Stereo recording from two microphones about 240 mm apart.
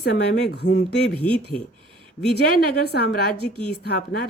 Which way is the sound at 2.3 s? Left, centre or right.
Left.